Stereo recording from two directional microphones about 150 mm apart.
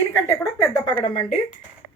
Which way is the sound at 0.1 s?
15° left (ahead or behind).